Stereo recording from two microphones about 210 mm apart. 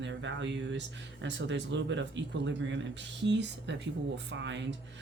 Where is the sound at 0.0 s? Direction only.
60° right (ahead or behind).